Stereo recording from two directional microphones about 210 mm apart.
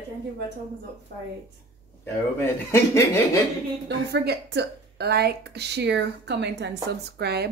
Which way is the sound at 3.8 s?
50° right (ahead or behind).